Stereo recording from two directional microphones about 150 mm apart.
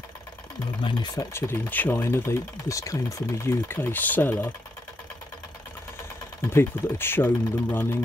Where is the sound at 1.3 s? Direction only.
15° left (ahead or behind).